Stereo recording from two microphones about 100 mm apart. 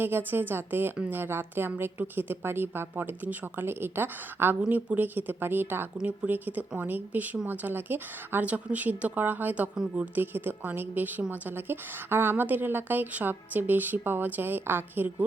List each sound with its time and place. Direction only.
0.0 s a woman's voice: 20° right (ahead or behind)